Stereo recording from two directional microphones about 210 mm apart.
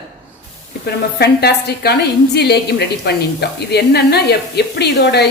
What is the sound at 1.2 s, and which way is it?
A woman's voice, 50° left (ahead or behind).